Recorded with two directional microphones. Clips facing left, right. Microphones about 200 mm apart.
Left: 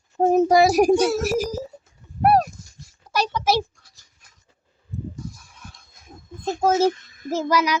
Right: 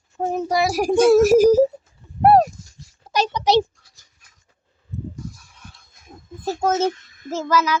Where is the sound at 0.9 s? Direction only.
50° right (ahead or behind).